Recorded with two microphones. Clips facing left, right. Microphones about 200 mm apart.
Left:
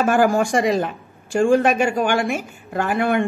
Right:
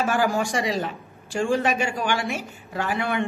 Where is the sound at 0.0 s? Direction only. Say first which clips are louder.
Left 6 dB; 50° left (ahead or behind).